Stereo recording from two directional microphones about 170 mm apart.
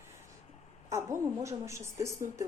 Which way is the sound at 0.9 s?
15° right (ahead or behind).